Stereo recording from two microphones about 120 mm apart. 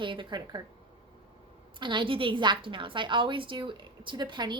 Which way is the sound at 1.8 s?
40° right (ahead or behind).